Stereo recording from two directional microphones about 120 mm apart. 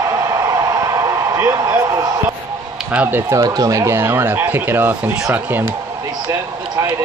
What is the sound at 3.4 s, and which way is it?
Speech, 30° right (ahead or behind).